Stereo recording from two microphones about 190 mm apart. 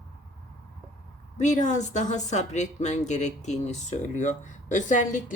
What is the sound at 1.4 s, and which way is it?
Speech, 40° left (ahead or behind).